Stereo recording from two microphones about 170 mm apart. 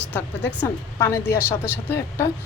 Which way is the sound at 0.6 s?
15° left (ahead or behind).